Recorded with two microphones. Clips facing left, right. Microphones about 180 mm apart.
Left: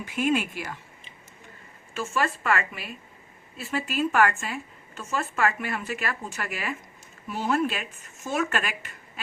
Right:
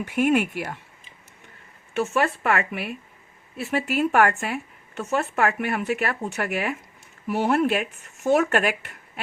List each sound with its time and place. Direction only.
0.0 s a woman's voice: 60° right (ahead or behind)
1.9 s a woman's voice: 65° right (ahead or behind)